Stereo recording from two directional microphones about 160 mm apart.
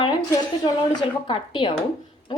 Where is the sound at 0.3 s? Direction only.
25° left (ahead or behind).